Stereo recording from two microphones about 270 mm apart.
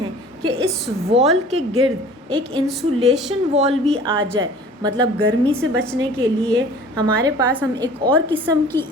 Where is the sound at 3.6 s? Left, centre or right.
Centre.